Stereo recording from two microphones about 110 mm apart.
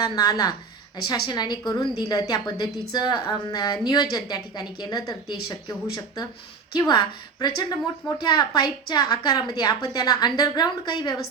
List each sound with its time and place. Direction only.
0.0 s a woman's voice: 40° left (ahead or behind)